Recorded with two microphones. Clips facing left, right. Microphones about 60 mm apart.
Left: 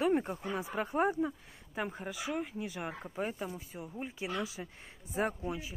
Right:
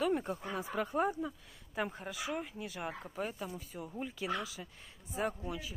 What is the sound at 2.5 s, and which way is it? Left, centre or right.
Speech, centre.